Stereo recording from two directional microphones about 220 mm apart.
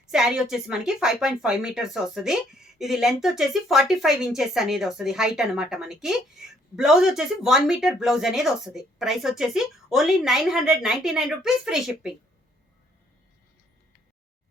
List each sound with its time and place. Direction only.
0.1 s speech: 5° right (ahead or behind)